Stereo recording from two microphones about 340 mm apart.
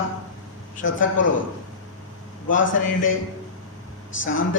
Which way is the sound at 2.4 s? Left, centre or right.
Left.